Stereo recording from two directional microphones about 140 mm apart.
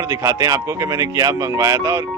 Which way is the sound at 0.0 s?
20° right (ahead or behind).